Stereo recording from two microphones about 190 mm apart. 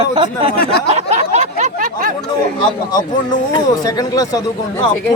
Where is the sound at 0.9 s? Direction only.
35° right (ahead or behind).